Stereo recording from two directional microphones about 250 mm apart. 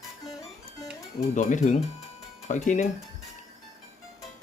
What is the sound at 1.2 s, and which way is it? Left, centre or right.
Speech, left.